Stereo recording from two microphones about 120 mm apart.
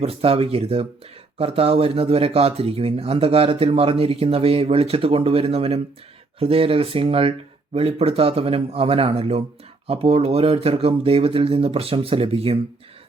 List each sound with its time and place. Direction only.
0.0 s speech: 55° right (ahead or behind)